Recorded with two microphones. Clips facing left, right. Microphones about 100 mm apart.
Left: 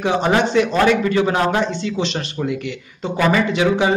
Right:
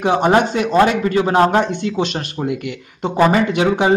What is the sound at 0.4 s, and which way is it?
A man's voice, 45° right (ahead or behind).